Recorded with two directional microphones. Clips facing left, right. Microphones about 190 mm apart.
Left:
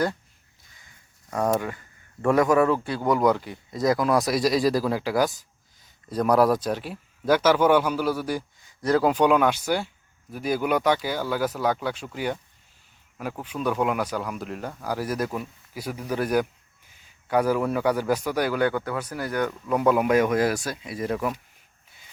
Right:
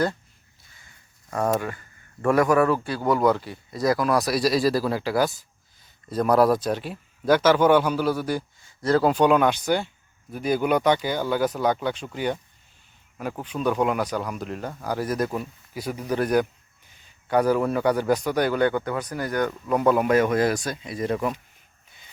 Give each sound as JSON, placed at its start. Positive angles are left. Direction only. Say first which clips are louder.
{"t": 1.5, "sound": "a man's voice", "louder": "even", "side_deg": 15}
{"t": 13.4, "sound": "a man's voice", "louder": "right 2 dB", "side_deg": 5}